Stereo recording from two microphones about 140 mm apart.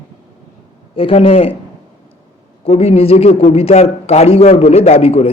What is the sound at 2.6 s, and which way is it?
A man's voice, 45° left (ahead or behind).